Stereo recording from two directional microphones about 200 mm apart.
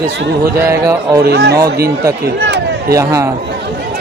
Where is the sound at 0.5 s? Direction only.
15° right (ahead or behind).